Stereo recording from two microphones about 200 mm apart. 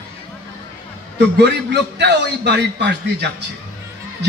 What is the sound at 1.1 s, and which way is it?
A man's voice, 60° right (ahead or behind).